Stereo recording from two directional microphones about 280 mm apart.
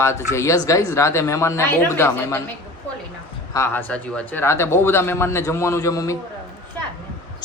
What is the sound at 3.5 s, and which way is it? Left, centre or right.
Speech, centre.